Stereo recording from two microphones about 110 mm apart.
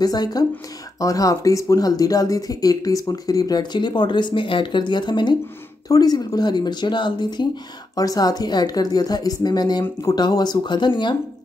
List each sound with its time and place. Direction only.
0.0 s speech: 35° left (ahead or behind)